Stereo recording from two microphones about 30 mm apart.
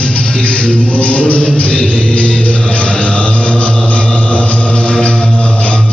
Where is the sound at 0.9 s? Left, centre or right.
Left.